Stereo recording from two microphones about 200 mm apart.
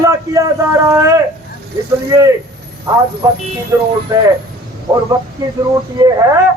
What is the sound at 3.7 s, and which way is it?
Speech, 10° right (ahead or behind).